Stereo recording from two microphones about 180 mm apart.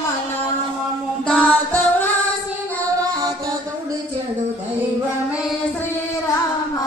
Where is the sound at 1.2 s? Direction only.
10° left (ahead or behind).